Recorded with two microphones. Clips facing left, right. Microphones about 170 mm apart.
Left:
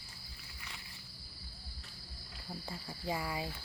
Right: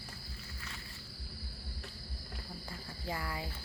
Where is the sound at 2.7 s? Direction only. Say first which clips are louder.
Left 3 dB; 20° left (ahead or behind).